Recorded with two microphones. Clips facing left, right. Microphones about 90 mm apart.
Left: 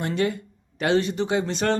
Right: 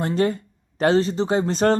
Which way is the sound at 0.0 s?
35° right (ahead or behind).